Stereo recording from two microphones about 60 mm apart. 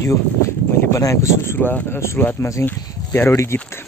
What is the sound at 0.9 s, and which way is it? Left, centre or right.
Speech, left.